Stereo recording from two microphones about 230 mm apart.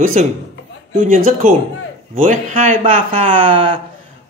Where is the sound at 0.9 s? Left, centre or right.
Right.